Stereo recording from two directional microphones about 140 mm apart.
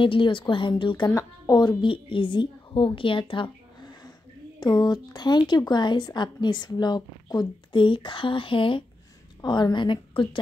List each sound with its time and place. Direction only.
0.0 s a woman's voice: 40° left (ahead or behind)